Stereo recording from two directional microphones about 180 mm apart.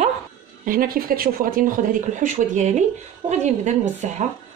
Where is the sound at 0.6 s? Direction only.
50° right (ahead or behind).